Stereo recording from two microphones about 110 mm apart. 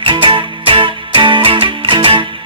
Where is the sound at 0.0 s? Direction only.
50° right (ahead or behind).